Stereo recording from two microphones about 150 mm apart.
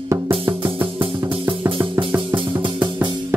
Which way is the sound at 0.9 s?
35° right (ahead or behind).